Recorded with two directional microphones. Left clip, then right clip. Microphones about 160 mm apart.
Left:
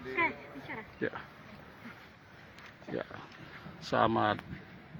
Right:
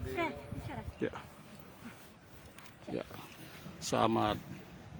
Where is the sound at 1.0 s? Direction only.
20° right (ahead or behind).